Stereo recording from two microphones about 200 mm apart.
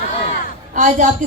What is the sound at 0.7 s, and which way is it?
Speech, 40° right (ahead or behind).